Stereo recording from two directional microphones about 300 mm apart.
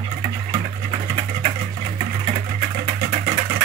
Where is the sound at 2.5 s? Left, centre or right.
Right.